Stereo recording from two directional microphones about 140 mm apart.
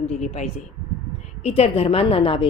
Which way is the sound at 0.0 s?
50° left (ahead or behind).